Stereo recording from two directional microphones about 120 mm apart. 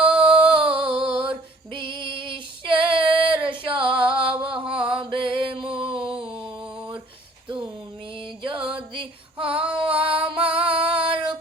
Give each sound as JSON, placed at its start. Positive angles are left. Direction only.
{"t": 0.0, "sound": "music", "side_deg": -45}
{"t": 0.5, "sound": "a sound", "side_deg": -45}
{"t": 4.7, "sound": "mantra", "side_deg": -45}
{"t": 7.4, "sound": "a sound", "side_deg": -45}
{"t": 8.2, "sound": "female singing", "side_deg": -45}
{"t": 10.2, "sound": "music", "side_deg": -45}